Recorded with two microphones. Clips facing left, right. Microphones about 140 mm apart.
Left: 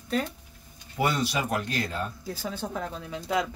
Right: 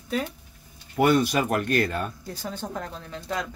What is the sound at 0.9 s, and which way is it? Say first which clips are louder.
Speech: right 6 dB; 55° right (ahead or behind).